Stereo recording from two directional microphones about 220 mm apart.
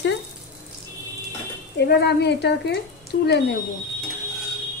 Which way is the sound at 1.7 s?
50° left (ahead or behind).